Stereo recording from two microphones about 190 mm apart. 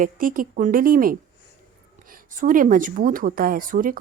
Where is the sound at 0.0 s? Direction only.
45° right (ahead or behind).